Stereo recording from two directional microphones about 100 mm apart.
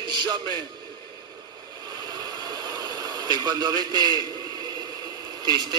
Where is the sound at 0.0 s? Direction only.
45° right (ahead or behind).